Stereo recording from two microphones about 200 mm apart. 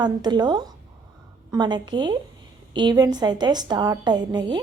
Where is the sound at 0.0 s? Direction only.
20° right (ahead or behind).